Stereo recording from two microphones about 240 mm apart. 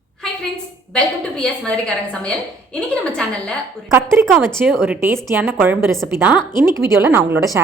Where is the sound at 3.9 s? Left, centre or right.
Centre.